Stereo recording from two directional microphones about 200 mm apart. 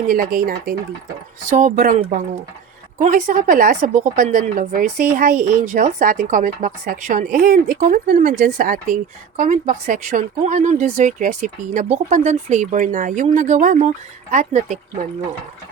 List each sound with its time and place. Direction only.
0.1 s a woman's voice: 45° right (ahead or behind)